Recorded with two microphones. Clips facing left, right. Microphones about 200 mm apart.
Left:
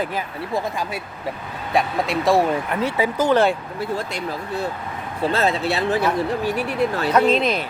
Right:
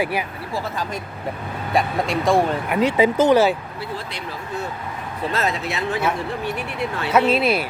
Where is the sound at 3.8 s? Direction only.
45° left (ahead or behind).